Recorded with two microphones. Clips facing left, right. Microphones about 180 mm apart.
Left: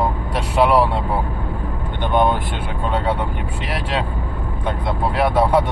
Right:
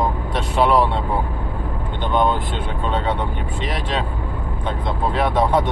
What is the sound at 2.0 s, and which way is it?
Vehicle, 15° left (ahead or behind).